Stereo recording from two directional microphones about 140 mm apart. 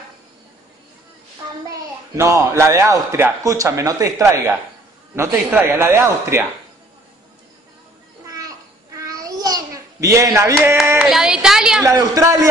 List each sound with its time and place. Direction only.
1.7 s a man's voice: 20° right (ahead or behind)
9.0 s babbling: 25° right (ahead or behind)
11.0 s a sound: 5° right (ahead or behind)
11.8 s a man's voice: 25° right (ahead or behind)